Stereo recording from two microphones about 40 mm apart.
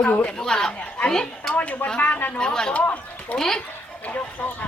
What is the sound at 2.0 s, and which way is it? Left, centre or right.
Speech, left.